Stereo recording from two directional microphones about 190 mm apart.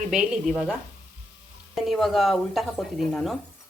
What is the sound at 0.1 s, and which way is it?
Speech, 5° right (ahead or behind).